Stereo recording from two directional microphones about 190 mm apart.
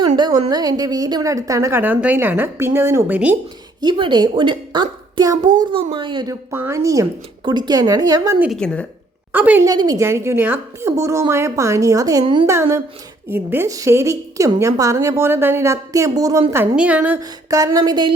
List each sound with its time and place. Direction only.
0.2 s a woman's voice: 25° right (ahead or behind); by 3.3 s 10° right (ahead or behind)
3.8 s a woman's voice: 25° right (ahead or behind)
6.5 s a woman's voice: 15° right (ahead or behind)
8.4 s a woman's voice: 5° left (ahead or behind)
9.3 s a woman's voice: 10° right (ahead or behind)
9.6 s a woman's voice: 20° right (ahead or behind)
12.5 s a woman's voice: 15° right (ahead or behind)
17.2 s a woman's voice: 20° right (ahead or behind)